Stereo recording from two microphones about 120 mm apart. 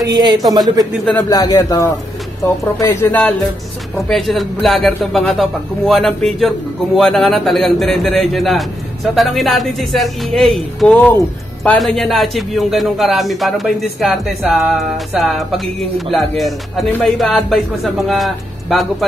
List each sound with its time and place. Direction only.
0.0 s a man's voice: 35° right (ahead or behind)
1.1 s a man's voice: 30° left (ahead or behind)
3.1 s speech: 10° left (ahead or behind)
11.0 s speech: 15° left (ahead or behind)
11.8 s speech: centre (ahead or behind)